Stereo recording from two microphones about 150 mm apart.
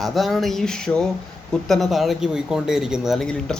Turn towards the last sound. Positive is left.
turn(degrees=5)  # may be behind; listen again after turning